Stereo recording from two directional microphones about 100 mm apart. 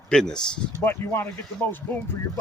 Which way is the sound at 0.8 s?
25° left (ahead or behind).